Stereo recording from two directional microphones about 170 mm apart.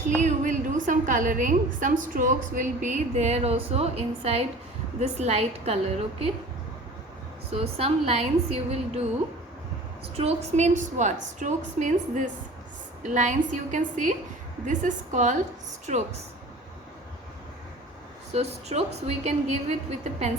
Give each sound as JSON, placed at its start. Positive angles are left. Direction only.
{"t": 0.2, "sound": "a woman's voice", "side_deg": -50}
{"t": 7.5, "sound": "a woman's voice", "side_deg": -35}
{"t": 10.2, "sound": "a woman's voice", "side_deg": -35}
{"t": 18.3, "sound": "a woman's voice", "side_deg": -35}